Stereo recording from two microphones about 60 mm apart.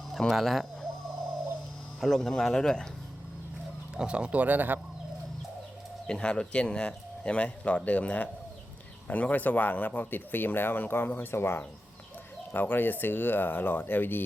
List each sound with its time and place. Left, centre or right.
0.1 s speech: centre
2.0 s speech: centre
3.9 s speech: centre
6.1 s speech: centre; by 14.3 s left